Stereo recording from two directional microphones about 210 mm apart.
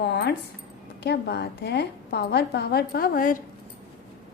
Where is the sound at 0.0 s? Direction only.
50° left (ahead or behind).